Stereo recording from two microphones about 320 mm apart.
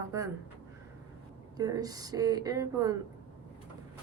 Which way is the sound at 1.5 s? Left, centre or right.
Centre.